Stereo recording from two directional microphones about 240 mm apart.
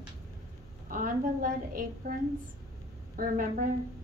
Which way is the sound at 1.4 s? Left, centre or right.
Right.